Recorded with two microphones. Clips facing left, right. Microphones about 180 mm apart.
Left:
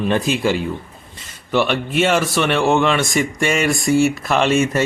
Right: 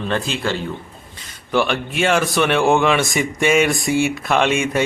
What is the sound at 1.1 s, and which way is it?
A man's voice, centre (ahead or behind).